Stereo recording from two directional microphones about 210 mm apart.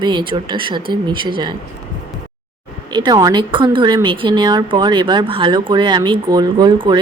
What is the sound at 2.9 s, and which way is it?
A woman's voice, 20° right (ahead or behind).